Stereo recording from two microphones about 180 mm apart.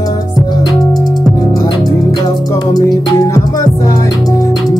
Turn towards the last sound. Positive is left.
turn(degrees=20)  # may be behind; listen again after turning